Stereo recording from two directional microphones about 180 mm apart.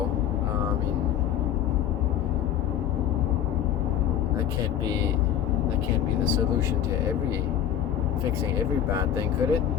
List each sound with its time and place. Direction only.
9.0 s speech: 20° right (ahead or behind)